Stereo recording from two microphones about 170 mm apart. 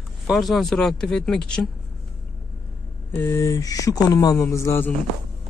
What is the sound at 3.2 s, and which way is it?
Speech, 15° left (ahead or behind).